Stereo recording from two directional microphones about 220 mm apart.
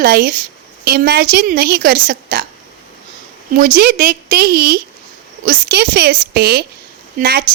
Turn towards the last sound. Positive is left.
turn(degrees=-45)  # may be behind; listen again after turning